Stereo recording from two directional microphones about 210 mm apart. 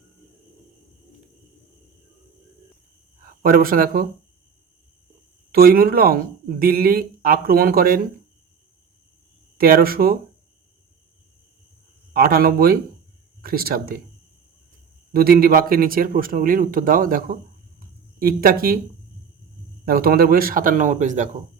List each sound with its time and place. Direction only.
3.2 s speech: 45° right (ahead or behind)
5.5 s a man's voice: 45° right (ahead or behind)
9.6 s a man's voice: 45° right (ahead or behind)
12.1 s a man's voice: 45° right (ahead or behind)
15.1 s a man's voice: 45° right (ahead or behind)
17.7 s a sound: 45° right (ahead or behind)
19.8 s a man's voice: 45° right (ahead or behind)